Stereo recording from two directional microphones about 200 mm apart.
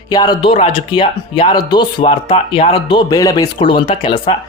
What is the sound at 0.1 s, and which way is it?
Speech, 20° left (ahead or behind).